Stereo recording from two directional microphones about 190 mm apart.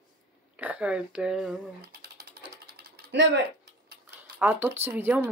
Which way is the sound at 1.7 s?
60° right (ahead or behind).